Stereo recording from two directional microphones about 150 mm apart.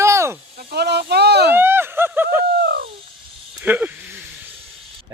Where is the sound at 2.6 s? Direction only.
90° right.